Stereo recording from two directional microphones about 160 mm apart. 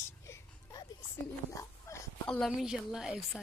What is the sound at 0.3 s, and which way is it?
Music, 20° left (ahead or behind).